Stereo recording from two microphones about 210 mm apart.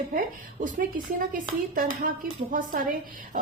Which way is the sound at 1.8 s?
45° right (ahead or behind).